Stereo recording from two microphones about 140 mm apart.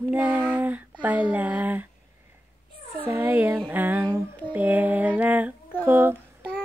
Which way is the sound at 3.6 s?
15° right (ahead or behind).